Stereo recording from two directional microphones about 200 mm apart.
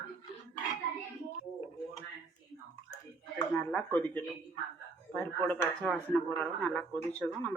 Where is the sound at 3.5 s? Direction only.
5° left (ahead or behind).